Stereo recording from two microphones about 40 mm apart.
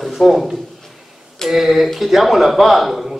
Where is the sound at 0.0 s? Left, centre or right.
Centre.